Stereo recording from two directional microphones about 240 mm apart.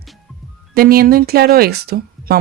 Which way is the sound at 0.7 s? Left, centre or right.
Right.